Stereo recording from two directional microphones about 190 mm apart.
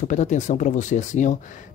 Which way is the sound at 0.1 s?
40° left (ahead or behind).